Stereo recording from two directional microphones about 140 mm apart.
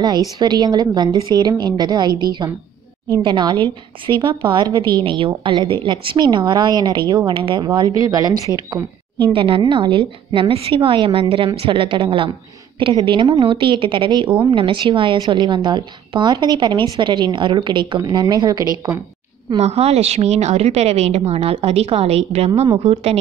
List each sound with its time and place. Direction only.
0.4 s a woman's voice: 30° right (ahead or behind)
9.2 s a woman's voice: 40° right (ahead or behind)
19.6 s a woman's voice: 50° right (ahead or behind)